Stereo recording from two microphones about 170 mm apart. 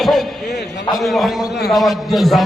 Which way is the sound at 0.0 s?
Centre (ahead or behind).